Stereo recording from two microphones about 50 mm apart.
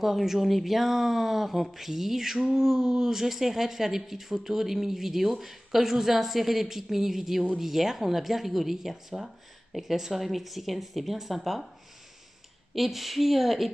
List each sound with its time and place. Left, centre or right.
0.0 s speech: centre
9.1 s speech: centre
9.7 s speech: centre
12.7 s speech: centre